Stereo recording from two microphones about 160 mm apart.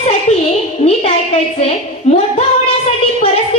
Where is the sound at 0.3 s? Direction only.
40° left (ahead or behind).